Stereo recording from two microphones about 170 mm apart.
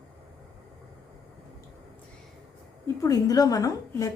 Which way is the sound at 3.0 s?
20° left (ahead or behind).